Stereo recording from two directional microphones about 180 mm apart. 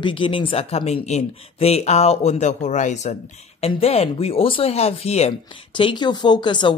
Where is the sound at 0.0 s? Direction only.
30° left (ahead or behind).